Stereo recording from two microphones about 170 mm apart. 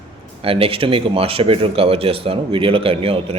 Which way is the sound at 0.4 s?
35° right (ahead or behind).